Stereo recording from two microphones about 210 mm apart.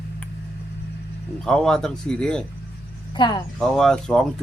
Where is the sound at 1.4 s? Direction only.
5° left (ahead or behind).